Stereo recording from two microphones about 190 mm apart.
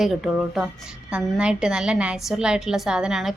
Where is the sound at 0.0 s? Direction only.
Centre (ahead or behind).